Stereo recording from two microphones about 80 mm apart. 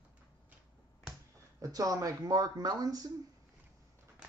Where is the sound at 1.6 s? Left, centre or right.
Right.